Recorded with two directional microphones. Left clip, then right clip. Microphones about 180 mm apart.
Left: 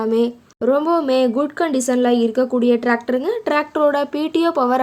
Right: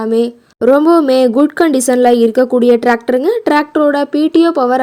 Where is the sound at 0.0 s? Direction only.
25° right (ahead or behind).